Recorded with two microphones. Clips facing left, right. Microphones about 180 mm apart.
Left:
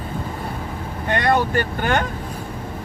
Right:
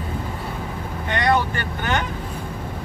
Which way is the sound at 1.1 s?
45° left (ahead or behind).